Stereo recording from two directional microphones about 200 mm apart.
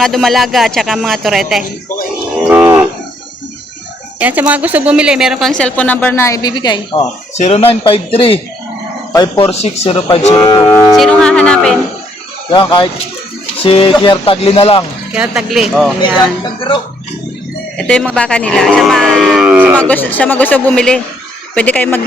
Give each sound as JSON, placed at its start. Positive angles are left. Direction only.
{"t": 0.0, "sound": "speech", "side_deg": 0}
{"t": 2.5, "sound": "moo", "side_deg": -10}
{"t": 4.2, "sound": "speech", "side_deg": -10}
{"t": 9.5, "sound": "speech", "side_deg": 30}
{"t": 10.4, "sound": "speech", "side_deg": 10}
{"t": 12.5, "sound": "speech", "side_deg": 25}
{"t": 15.1, "sound": "speech", "side_deg": -5}
{"t": 16.4, "sound": "speech", "side_deg": 25}
{"t": 17.7, "sound": "speech", "side_deg": 5}
{"t": 19.7, "sound": "speech", "side_deg": 5}